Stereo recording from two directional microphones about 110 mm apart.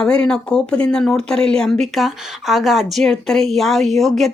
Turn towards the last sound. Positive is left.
turn(degrees=0)  # may be behind; listen again after turning